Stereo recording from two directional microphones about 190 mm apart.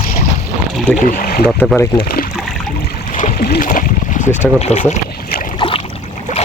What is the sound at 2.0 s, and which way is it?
Speech, 50° left (ahead or behind).